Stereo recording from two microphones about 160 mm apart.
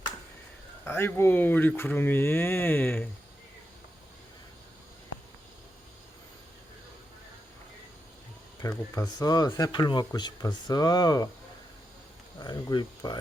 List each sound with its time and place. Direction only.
0.9 s speech: 15° left (ahead or behind)
8.6 s speech: 20° left (ahead or behind)
12.4 s speech: 25° left (ahead or behind)